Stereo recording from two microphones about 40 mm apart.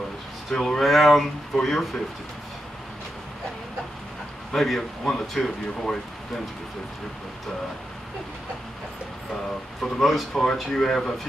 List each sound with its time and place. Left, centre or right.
0.5 s speech: centre
4.6 s speech: centre
9.8 s speech: centre